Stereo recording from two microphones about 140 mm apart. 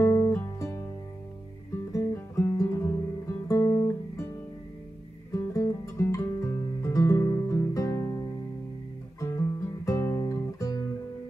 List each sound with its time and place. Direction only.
0.0 s music: 15° left (ahead or behind)
1.9 s music: 20° left (ahead or behind)
5.3 s music: 20° left (ahead or behind)
9.8 s guitar: 20° left (ahead or behind)